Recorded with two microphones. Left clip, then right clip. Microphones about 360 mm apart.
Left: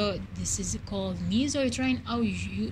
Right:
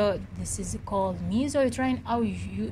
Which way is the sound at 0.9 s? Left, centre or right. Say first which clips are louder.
Right 8 dB; right.